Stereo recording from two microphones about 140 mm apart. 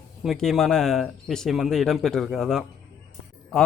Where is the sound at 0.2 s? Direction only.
Centre (ahead or behind).